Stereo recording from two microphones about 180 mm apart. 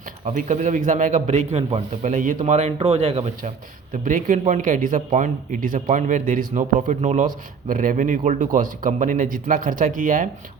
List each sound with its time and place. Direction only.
0.3 s a man's voice: 40° right (ahead or behind)
4.0 s speech: 45° right (ahead or behind)